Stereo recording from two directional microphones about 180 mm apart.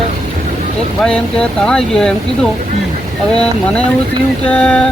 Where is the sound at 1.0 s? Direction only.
5° left (ahead or behind).